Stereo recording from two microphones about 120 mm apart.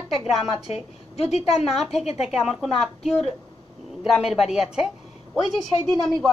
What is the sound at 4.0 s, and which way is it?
Speech, centre (ahead or behind).